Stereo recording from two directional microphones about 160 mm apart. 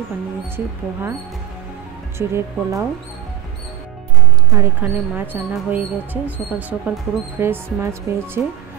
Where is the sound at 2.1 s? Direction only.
15° right (ahead or behind).